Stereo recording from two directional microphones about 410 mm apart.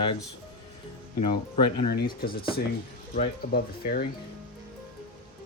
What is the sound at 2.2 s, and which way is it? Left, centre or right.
Speech, left.